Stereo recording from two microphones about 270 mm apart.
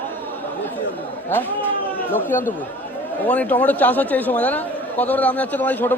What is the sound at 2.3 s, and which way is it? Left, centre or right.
Speech, left.